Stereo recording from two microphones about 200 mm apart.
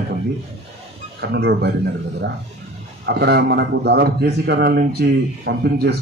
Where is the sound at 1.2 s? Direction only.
55° right (ahead or behind).